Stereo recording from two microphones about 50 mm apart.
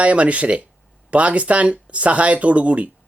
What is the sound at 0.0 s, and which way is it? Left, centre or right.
Speech, right.